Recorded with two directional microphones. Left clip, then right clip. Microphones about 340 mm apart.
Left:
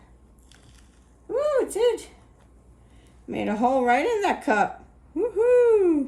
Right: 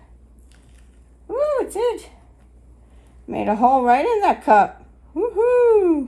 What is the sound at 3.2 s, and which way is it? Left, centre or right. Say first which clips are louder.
Speech: right 7 dB; centre.